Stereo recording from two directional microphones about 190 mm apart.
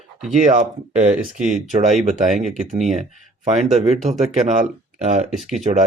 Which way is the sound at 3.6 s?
40° right (ahead or behind).